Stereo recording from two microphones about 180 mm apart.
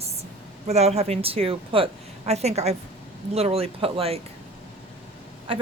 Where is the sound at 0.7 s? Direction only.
35° right (ahead or behind).